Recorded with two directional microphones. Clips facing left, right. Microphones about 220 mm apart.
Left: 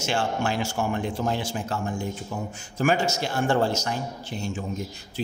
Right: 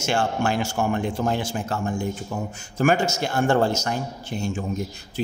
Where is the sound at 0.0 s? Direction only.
50° right (ahead or behind).